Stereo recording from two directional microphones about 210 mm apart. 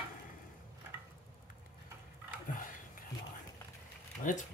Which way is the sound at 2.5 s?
40° left (ahead or behind).